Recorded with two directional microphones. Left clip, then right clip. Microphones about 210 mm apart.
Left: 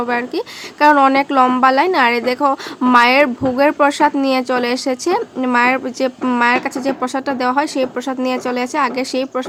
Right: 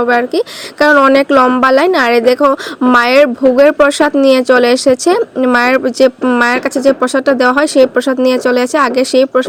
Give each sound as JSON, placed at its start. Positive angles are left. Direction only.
{"t": 0.0, "sound": "a woman's voice", "side_deg": -15}